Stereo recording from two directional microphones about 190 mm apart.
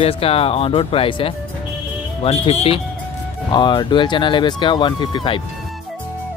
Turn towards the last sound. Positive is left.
turn(degrees=25)  # may be behind; listen again after turning